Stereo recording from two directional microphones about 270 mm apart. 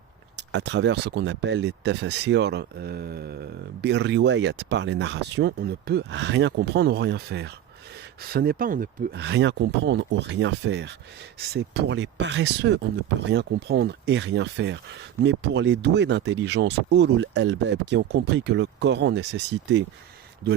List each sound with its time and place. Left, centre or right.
0.5 s speech: right